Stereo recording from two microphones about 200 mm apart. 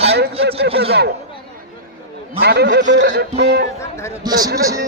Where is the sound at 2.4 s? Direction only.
55° right (ahead or behind).